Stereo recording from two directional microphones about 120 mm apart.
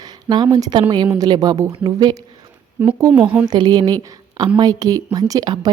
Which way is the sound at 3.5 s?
35° right (ahead or behind).